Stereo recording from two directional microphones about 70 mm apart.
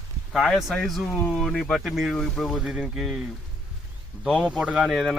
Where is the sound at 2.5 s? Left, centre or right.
Centre.